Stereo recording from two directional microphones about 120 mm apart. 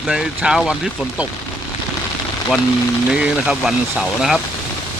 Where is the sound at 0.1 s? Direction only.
5° right (ahead or behind).